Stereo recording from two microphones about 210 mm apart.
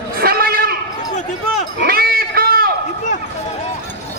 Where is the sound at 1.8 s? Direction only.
45° right (ahead or behind).